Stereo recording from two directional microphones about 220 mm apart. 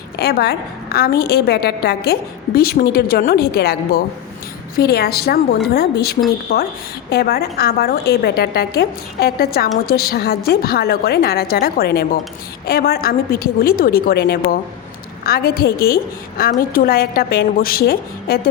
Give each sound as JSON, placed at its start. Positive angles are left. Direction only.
{"t": 0.2, "sound": "a woman's voice", "side_deg": 45}